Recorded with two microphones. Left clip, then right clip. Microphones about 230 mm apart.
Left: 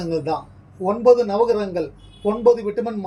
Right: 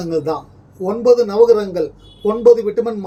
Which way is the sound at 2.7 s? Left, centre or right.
Right.